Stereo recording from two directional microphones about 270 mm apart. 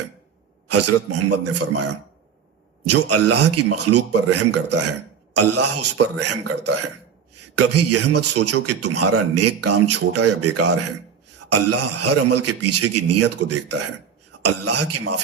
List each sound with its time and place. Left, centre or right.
0.9 s a man's voice: right